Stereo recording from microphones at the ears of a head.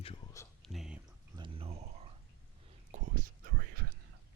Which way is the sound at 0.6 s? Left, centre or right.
Centre.